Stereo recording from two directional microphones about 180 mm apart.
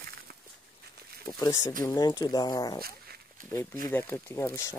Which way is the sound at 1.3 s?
20° left (ahead or behind).